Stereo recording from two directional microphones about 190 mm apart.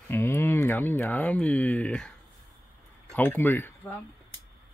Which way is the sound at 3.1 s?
10° left (ahead or behind).